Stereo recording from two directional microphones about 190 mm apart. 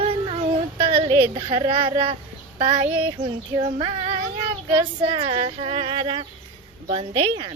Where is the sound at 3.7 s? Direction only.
30° right (ahead or behind).